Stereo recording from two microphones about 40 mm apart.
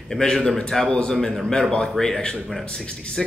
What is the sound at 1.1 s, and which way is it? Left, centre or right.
A man's voice, centre.